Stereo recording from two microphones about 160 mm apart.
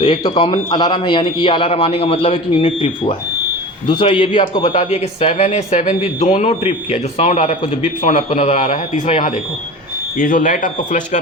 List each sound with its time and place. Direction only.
0.0 s a man's voice: 25° left (ahead or behind)
4.7 s speech: 40° left (ahead or behind)
10.2 s speech: 55° left (ahead or behind)